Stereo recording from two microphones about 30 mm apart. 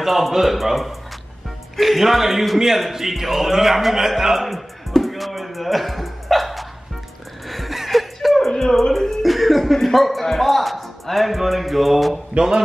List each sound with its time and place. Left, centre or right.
0.0 s music: centre
1.8 s a man's voice: centre
5.0 s a sound: centre
7.4 s music: centre
8.5 s music: centre
8.9 s music: centre
12.4 s a man's voice: right